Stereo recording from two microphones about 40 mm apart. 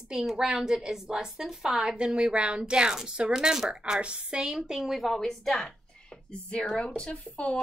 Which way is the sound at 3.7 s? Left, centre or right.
Right.